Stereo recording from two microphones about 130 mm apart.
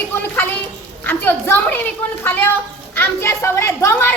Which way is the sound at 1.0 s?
15° left (ahead or behind).